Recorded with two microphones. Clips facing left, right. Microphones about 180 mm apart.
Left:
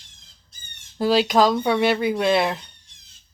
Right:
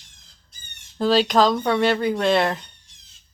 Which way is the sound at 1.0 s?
10° left (ahead or behind).